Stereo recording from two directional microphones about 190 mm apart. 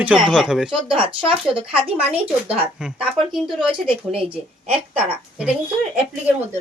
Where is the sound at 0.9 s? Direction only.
30° right (ahead or behind).